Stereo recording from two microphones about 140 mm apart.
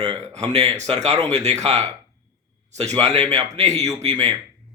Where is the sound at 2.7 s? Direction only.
55° right (ahead or behind).